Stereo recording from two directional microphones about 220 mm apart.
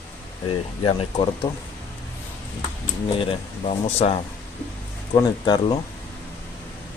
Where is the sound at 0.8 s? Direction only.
25° left (ahead or behind).